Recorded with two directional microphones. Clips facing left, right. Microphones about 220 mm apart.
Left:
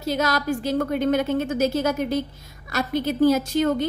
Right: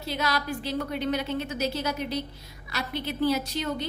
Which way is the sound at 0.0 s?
45° left (ahead or behind).